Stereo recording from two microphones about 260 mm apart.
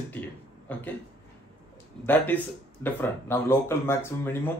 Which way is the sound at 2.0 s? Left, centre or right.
Centre.